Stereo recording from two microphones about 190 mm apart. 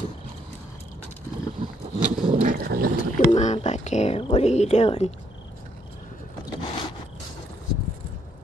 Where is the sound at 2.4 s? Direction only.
50° right (ahead or behind).